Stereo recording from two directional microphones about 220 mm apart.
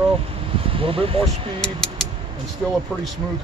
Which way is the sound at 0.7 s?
25° right (ahead or behind).